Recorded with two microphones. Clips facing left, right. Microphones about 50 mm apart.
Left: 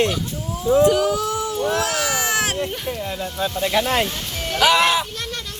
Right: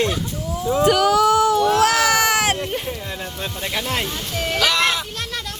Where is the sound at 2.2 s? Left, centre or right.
Right.